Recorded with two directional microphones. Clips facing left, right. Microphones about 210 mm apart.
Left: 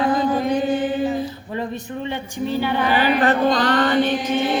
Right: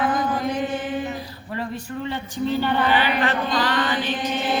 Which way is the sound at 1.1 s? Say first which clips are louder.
Left 6 dB; 25° left (ahead or behind).